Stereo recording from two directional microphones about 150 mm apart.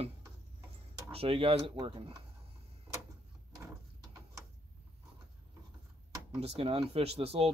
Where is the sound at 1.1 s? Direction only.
35° right (ahead or behind).